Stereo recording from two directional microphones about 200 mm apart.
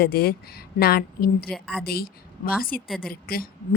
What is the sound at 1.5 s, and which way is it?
Speech, 5° left (ahead or behind).